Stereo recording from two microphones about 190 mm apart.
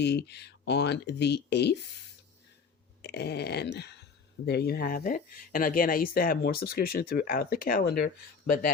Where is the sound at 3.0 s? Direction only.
60° left (ahead or behind).